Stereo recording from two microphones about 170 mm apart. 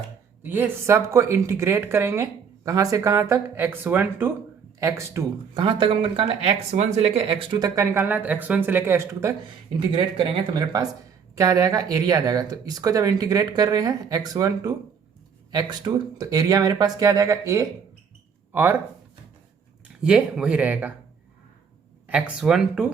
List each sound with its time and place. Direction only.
0.4 s speech: 10° right (ahead or behind)
5.6 s speech: 30° right (ahead or behind)
7.8 s speech: 10° right (ahead or behind)
9.7 s speech: 30° right (ahead or behind); by 18.8 s 10° right (ahead or behind)
20.0 s speech: 5° right (ahead or behind)
22.0 s speech: 5° right (ahead or behind)